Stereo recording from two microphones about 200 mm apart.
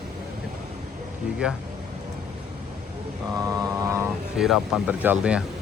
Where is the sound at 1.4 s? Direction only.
5° right (ahead or behind).